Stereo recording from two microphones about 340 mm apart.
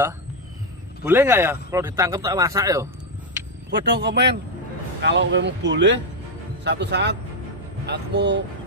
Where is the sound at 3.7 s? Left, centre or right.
Right.